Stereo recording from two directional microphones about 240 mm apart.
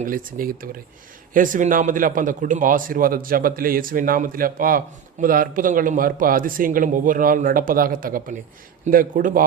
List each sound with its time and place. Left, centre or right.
0.0 s a man's voice: right